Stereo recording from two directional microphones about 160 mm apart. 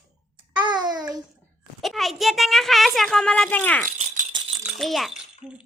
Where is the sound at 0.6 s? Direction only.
25° right (ahead or behind).